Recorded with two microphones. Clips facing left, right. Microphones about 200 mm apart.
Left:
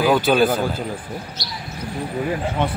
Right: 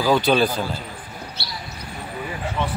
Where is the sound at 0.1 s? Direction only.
Centre (ahead or behind).